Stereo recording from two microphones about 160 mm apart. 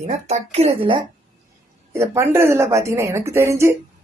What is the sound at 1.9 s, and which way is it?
Speech, 15° right (ahead or behind).